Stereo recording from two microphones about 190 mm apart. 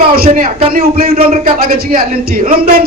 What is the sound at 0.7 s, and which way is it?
A man's voice, 50° right (ahead or behind).